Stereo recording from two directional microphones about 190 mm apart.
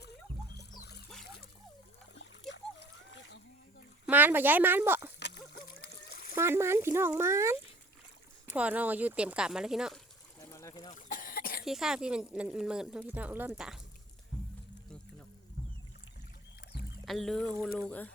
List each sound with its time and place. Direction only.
0.5 s music: 60° left (ahead or behind)
2.5 s splash: 70° left (ahead or behind)
4.0 s speech: 10° right (ahead or behind)
5.2 s splash: 60° left (ahead or behind)
6.3 s speech: 10° right (ahead or behind)
10.4 s a sound: 15° left (ahead or behind)
10.9 s cough: 45° left (ahead or behind)
11.6 s speech: centre (ahead or behind)
17.1 s speech: centre (ahead or behind)